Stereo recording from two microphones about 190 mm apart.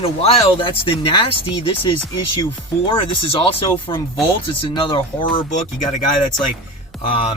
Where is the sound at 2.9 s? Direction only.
30° left (ahead or behind).